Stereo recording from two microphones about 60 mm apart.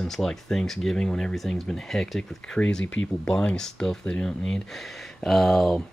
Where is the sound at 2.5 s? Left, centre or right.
Left; by 5.8 s centre.